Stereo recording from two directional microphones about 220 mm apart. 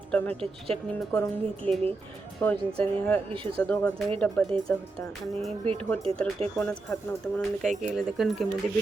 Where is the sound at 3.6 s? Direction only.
5° left (ahead or behind).